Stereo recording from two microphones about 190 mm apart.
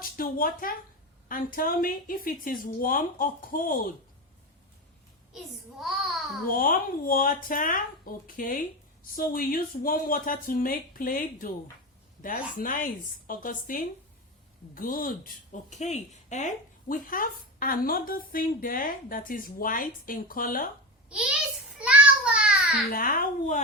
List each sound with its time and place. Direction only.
0.0 s a woman's voice: 50° left (ahead or behind)
5.8 s a child's voice: centre (ahead or behind)
6.5 s a woman's voice: 50° left (ahead or behind)
21.1 s a child's voice: 5° right (ahead or behind)
21.8 s child singing: 5° right (ahead or behind)
22.9 s a woman's voice: 50° left (ahead or behind)